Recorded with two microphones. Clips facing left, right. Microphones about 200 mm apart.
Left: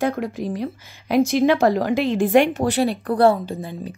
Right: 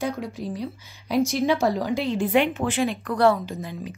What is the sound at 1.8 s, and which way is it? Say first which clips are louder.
Speech: left 5 dB; 90° left.